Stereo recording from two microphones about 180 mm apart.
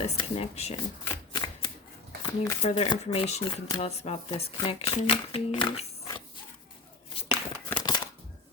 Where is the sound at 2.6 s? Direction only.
35° left (ahead or behind).